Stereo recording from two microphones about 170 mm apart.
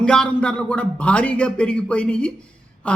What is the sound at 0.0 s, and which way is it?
A man's voice, 5° left (ahead or behind).